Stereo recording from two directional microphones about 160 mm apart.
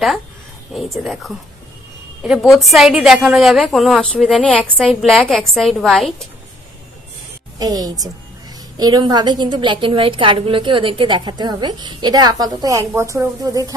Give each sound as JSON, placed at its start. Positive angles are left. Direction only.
{"t": 0.7, "sound": "a woman's voice", "side_deg": 0}
{"t": 7.5, "sound": "a woman's voice", "side_deg": -25}